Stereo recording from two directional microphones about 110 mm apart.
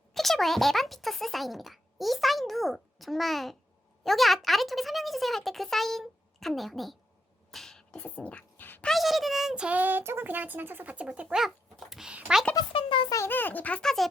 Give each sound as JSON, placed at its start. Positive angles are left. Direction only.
{"t": 0.1, "sound": "a child's voice", "side_deg": 0}
{"t": 7.5, "sound": "beatboxing", "side_deg": 5}
{"t": 8.0, "sound": "speech", "side_deg": 15}
{"t": 8.9, "sound": "a child's voice", "side_deg": 0}
{"t": 12.7, "sound": "a child's voice", "side_deg": 50}
{"t": 13.1, "sound": "a child's voice", "side_deg": 30}
{"t": 13.3, "sound": "speech", "side_deg": 15}